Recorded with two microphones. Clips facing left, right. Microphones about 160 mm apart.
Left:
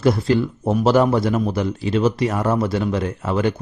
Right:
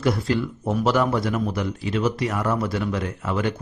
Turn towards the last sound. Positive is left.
turn(degrees=30)  # may be behind; listen again after turning